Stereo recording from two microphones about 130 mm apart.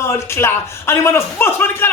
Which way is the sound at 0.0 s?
20° left (ahead or behind).